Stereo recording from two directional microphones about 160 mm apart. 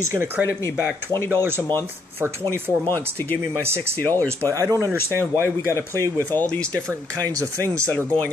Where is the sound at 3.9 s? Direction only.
10° left (ahead or behind).